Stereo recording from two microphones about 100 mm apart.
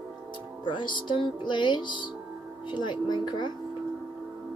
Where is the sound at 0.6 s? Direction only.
50° left (ahead or behind).